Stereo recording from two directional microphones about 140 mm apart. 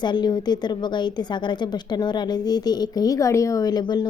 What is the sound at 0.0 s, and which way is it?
A woman's voice, 30° left (ahead or behind).